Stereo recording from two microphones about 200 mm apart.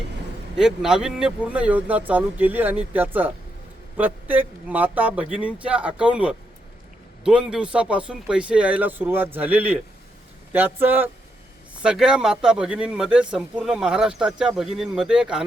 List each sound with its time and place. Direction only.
0.5 s speech: 5° right (ahead or behind)